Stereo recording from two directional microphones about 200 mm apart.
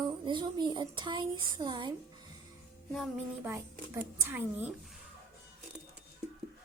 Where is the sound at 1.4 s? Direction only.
20° right (ahead or behind).